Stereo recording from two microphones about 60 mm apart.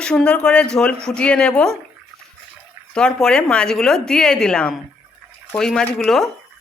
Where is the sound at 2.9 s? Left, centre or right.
Centre.